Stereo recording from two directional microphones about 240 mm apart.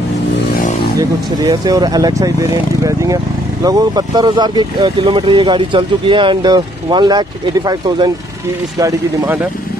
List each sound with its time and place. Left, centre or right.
1.4 s speech: centre